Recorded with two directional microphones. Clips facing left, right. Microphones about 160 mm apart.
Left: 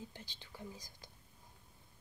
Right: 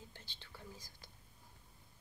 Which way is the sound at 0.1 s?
15° left (ahead or behind).